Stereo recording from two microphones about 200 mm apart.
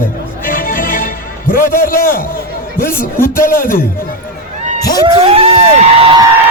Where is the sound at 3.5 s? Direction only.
45° left (ahead or behind).